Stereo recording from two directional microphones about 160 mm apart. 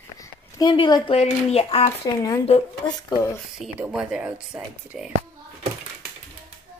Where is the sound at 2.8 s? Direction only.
25° left (ahead or behind).